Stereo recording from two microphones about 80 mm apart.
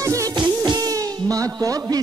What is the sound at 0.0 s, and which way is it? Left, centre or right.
Music, right.